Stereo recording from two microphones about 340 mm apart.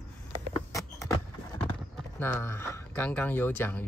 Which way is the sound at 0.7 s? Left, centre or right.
Centre.